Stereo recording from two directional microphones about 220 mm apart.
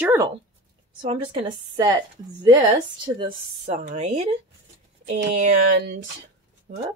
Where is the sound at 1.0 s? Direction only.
25° right (ahead or behind).